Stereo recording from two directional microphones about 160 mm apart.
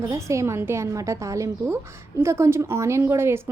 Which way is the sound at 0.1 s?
20° right (ahead or behind).